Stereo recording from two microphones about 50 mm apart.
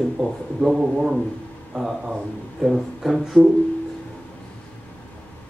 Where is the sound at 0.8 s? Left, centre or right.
Centre.